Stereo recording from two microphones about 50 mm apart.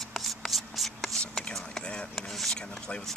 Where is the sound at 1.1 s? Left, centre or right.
Centre.